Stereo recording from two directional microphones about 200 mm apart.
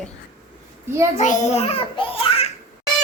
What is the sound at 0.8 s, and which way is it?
Speech, 15° right (ahead or behind).